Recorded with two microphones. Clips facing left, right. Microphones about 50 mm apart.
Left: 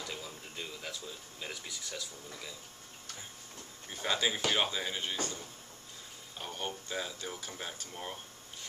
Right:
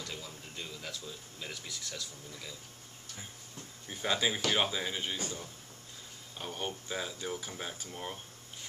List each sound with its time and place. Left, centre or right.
0.0 s speech: centre
3.9 s speech: centre